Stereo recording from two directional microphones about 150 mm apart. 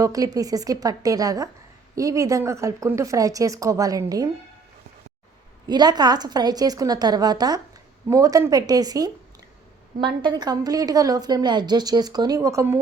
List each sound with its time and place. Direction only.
0.0 s a woman's voice: 25° right (ahead or behind)
5.6 s a woman's voice: 30° right (ahead or behind)